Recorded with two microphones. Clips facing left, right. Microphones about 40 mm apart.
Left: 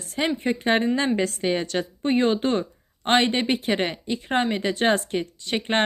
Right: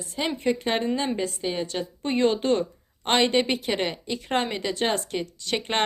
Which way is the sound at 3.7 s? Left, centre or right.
Left.